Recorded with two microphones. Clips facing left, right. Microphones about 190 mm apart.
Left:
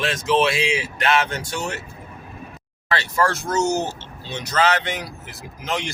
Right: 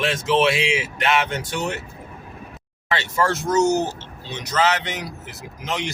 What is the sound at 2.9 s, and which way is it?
Speech, 20° right (ahead or behind).